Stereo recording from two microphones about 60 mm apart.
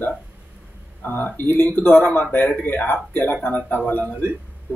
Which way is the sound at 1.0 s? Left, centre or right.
Left.